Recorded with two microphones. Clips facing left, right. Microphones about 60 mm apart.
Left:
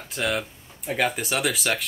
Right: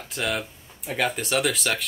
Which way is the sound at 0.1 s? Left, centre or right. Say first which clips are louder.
Left 1 dB; centre.